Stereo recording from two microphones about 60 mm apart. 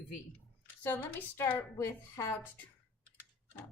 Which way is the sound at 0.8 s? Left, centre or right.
Left.